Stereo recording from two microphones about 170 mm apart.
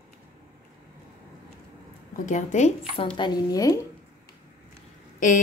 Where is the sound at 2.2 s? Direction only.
45° left (ahead or behind).